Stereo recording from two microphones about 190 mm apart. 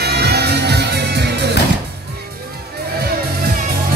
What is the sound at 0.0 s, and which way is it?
Music, 60° right (ahead or behind).